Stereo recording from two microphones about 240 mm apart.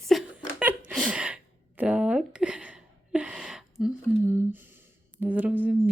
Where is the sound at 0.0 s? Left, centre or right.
Centre.